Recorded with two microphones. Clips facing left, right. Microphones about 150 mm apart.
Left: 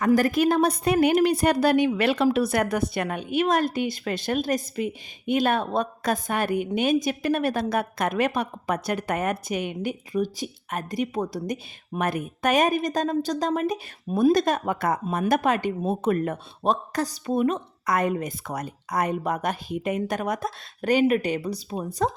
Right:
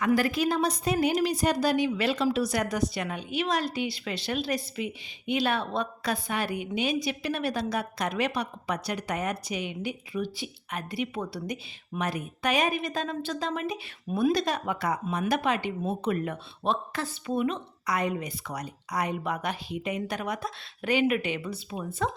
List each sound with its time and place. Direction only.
0.0 s a woman's voice: 45° left (ahead or behind)